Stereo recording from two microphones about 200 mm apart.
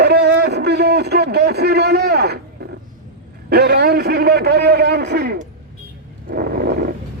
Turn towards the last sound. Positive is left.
turn(degrees=-50)  # may be behind; listen again after turning